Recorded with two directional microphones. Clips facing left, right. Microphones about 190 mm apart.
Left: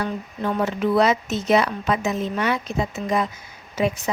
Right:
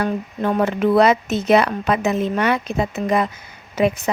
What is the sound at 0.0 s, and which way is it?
Speech, 55° right (ahead or behind).